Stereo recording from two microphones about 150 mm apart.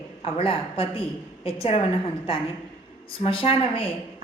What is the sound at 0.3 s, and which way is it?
A woman's voice, 40° left (ahead or behind).